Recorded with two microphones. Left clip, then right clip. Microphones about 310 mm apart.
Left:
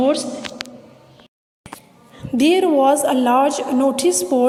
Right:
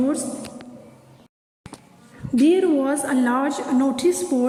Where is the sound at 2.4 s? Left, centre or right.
Centre.